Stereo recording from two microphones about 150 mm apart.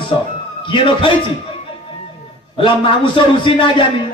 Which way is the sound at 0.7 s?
35° left (ahead or behind).